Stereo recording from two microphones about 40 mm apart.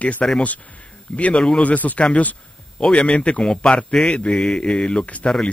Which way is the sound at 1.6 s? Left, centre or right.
Left.